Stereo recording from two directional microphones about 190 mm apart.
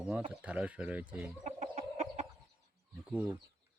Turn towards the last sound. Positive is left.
turn(degrees=-10)  # may be behind; listen again after turning